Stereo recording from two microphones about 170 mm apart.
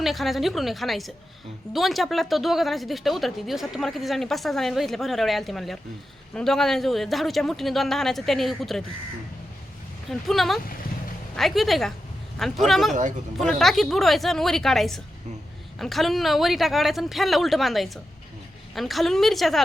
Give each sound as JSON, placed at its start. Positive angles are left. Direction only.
{"t": 0.0, "sound": "a woman's voice", "side_deg": 0}
{"t": 10.1, "sound": "a woman's voice", "side_deg": 0}
{"t": 12.9, "sound": "speech", "side_deg": -45}
{"t": 13.4, "sound": "a woman's voice", "side_deg": 0}